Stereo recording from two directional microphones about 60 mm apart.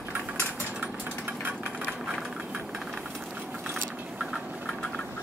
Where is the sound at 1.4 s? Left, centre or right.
Right.